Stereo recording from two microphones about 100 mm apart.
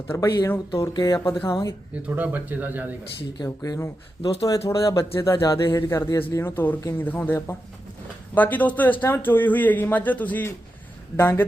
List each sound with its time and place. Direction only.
0.1 s speech: 25° left (ahead or behind)
0.9 s speech: 45° left (ahead or behind)
1.2 s speech: 25° left (ahead or behind)
2.0 s speech: 15° right (ahead or behind)
3.6 s speech: 30° left (ahead or behind)
8.4 s a man's voice: 15° left (ahead or behind)